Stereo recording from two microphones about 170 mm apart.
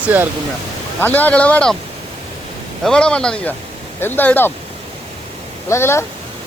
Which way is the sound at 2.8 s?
5° left (ahead or behind).